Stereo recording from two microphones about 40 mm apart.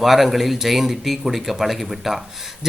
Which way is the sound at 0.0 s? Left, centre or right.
Centre.